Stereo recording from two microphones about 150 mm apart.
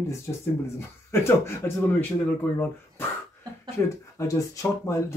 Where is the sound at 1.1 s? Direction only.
15° left (ahead or behind).